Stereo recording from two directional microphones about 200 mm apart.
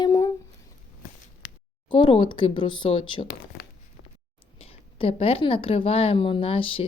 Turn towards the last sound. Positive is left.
turn(degrees=25)  # may be behind; listen again after turning